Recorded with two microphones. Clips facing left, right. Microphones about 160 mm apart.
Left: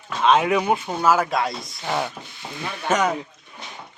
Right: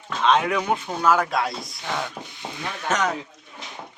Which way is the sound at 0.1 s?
10° left (ahead or behind).